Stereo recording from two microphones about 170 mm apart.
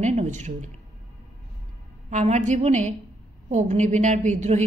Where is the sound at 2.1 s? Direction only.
45° right (ahead or behind).